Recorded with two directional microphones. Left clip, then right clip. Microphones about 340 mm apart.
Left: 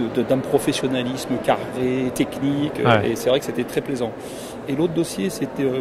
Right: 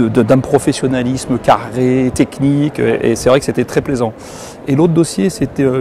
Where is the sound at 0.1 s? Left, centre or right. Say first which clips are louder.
Right 6 dB; right.